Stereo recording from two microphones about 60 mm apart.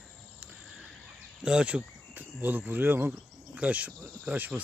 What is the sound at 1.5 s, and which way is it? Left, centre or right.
Speech, centre.